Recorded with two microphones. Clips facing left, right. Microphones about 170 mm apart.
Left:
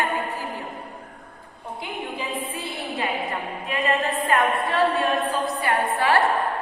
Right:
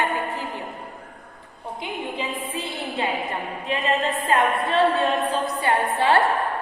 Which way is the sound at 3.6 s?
25° right (ahead or behind).